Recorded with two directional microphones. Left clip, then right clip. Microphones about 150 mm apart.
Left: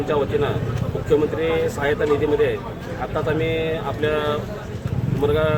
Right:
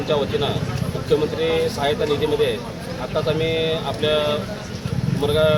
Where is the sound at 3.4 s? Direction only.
45° left (ahead or behind).